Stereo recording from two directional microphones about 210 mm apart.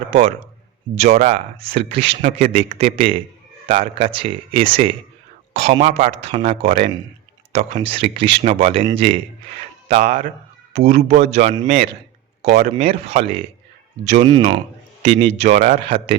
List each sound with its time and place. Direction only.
0.1 s a man's voice: 25° right (ahead or behind)
14.3 s speech: 20° right (ahead or behind)